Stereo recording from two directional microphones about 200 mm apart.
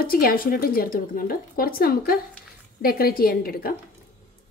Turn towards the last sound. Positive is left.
turn(degrees=45)  # may be behind; listen again after turning